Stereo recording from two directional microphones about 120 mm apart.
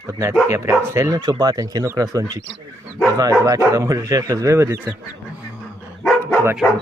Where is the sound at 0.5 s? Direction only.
25° right (ahead or behind).